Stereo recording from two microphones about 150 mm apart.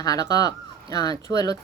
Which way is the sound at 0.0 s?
25° left (ahead or behind).